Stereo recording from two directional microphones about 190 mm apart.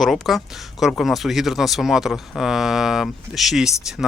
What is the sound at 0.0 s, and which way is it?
Speech, centre (ahead or behind).